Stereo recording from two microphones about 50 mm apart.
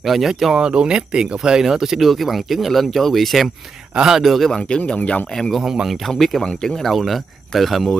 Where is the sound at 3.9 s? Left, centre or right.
Centre.